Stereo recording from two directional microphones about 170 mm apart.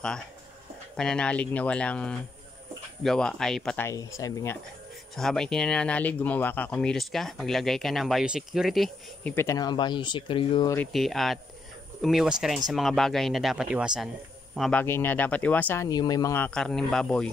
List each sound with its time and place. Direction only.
0.9 s speech: 5° left (ahead or behind)
3.8 s speech: 20° left (ahead or behind)
5.1 s speech: 5° left (ahead or behind)
9.3 s speech: 15° left (ahead or behind)
10.9 s speech: centre (ahead or behind)
14.8 s speech: 10° left (ahead or behind)
16.4 s speech: 5° left (ahead or behind)